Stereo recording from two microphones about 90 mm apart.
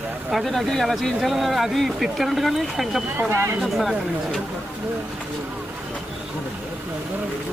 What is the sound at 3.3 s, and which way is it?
Speech, 30° right (ahead or behind).